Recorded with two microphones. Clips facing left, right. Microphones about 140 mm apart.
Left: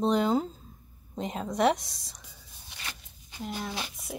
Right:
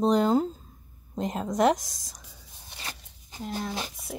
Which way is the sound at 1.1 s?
Centre (ahead or behind).